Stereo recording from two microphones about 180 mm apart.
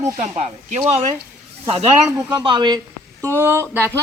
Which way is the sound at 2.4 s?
25° right (ahead or behind).